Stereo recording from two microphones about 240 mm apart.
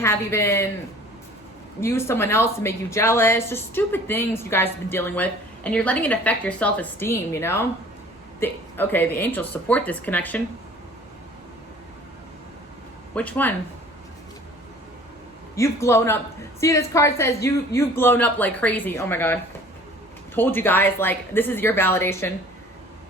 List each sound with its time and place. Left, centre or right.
0.0 s speech: centre
1.8 s speech: centre
13.1 s speech: centre
15.5 s speech: centre